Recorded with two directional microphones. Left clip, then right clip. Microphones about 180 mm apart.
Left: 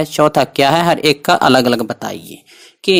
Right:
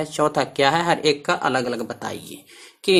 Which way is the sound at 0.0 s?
35° left (ahead or behind).